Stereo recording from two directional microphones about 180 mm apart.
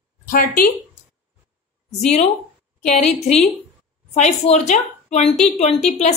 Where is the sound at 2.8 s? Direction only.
40° left (ahead or behind).